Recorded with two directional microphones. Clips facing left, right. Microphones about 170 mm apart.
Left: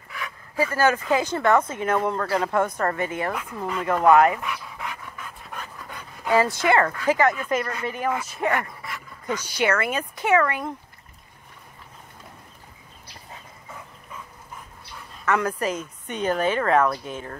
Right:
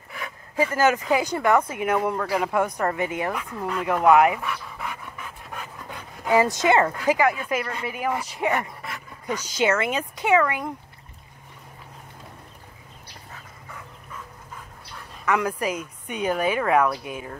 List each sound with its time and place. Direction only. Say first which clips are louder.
0.6 s speech: right 1 dB; 20° right (ahead or behind)
3.3 s speech: even; centre (ahead or behind)
3.8 s speech: even; 10° right (ahead or behind)
4.5 s dog: right 1 dB; centre (ahead or behind)
5.9 s speech: right 1 dB; 15° right (ahead or behind)
15.2 s speech: even; 10° right (ahead or behind)